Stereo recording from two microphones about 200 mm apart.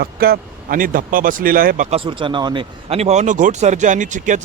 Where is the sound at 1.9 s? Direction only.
25° right (ahead or behind).